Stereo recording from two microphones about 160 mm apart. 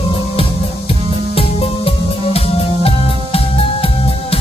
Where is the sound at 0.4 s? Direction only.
35° left (ahead or behind).